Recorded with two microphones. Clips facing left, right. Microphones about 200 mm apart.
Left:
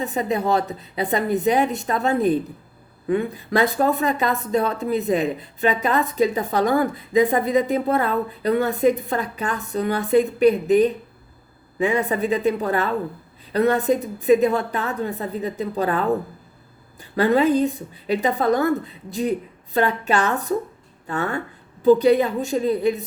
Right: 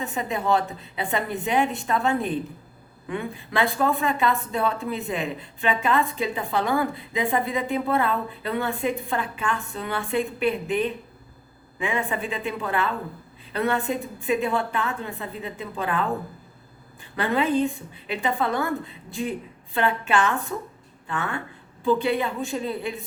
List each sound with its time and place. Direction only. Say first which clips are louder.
0.0 s speech: left 5 dB; 35° left (ahead or behind)